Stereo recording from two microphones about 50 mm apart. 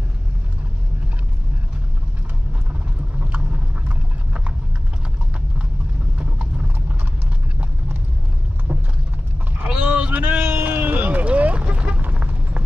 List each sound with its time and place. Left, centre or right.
8.7 s clip-clop: right
9.8 s a sound: right
10.4 s vehicle: right